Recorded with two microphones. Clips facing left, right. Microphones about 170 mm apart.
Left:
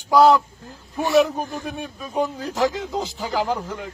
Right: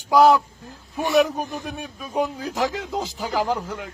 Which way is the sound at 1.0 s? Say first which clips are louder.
Left 1 dB; 15° right (ahead or behind).